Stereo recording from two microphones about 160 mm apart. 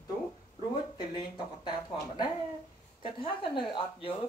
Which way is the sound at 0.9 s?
25° left (ahead or behind).